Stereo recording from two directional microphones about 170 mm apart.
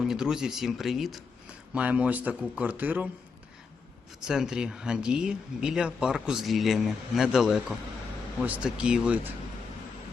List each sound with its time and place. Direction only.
0.0 s speech: 5° right (ahead or behind)
4.2 s speech: 5° right (ahead or behind)